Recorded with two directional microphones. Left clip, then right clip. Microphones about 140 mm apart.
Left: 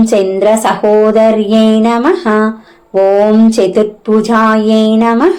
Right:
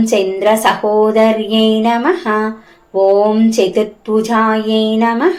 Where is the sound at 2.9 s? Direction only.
30° left (ahead or behind).